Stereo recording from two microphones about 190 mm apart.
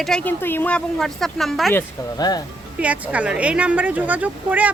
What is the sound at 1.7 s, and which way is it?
Speech, 20° left (ahead or behind).